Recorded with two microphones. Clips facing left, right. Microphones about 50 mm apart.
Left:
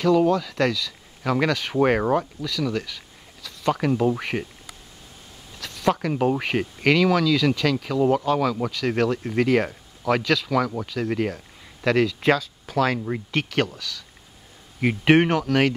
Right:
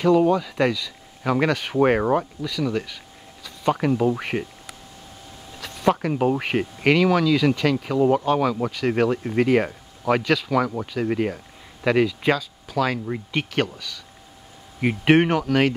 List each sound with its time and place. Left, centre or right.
0.3 s speech: centre
2.4 s speech: centre
5.6 s a sound: centre
5.9 s speech: centre
13.3 s speech: centre
14.8 s speech: centre